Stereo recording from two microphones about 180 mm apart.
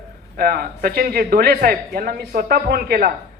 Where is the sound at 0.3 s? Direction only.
55° right (ahead or behind).